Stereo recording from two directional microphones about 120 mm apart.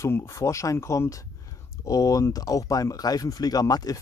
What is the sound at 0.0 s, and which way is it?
Speech, 20° left (ahead or behind).